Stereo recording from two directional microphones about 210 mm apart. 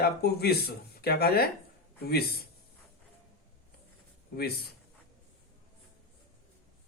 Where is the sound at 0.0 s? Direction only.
50° left (ahead or behind).